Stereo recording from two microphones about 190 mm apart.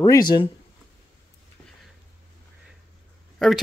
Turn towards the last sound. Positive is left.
turn(degrees=0)  # may be behind; listen again after turning